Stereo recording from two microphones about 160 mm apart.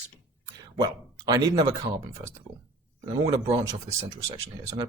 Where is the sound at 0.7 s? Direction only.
25° right (ahead or behind).